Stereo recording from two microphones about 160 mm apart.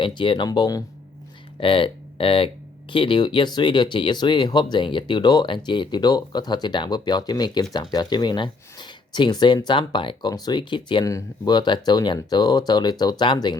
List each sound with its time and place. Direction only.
0.0 s speech: 30° left (ahead or behind)